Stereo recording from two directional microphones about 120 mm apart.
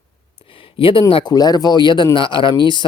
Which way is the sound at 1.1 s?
45° left (ahead or behind).